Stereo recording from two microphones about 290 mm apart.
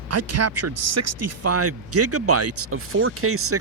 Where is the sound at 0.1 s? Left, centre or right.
Right.